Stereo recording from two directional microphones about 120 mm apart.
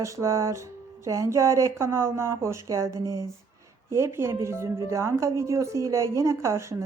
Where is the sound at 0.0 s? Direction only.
25° right (ahead or behind).